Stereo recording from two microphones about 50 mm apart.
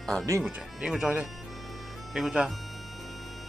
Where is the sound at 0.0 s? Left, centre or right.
Centre.